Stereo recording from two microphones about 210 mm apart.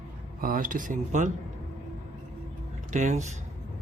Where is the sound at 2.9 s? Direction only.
35° right (ahead or behind).